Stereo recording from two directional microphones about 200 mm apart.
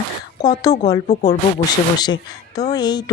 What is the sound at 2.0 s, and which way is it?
A woman's voice, 20° left (ahead or behind).